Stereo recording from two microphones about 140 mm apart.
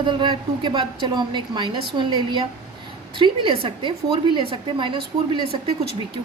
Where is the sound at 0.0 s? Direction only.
35° right (ahead or behind).